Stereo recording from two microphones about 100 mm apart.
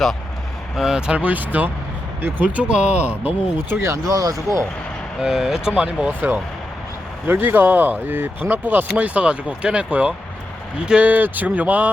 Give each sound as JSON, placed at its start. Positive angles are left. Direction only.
{"t": 0.8, "sound": "speech", "side_deg": -10}
{"t": 5.2, "sound": "speech", "side_deg": -5}